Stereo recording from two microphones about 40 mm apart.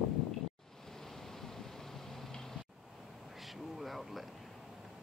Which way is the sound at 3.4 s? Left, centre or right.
Centre.